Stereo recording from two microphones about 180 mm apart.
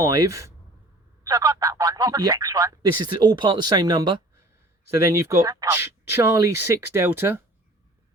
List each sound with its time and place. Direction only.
0.0 s speech: 20° right (ahead or behind)